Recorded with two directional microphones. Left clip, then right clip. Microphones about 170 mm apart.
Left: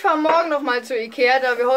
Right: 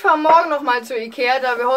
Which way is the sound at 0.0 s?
Centre (ahead or behind).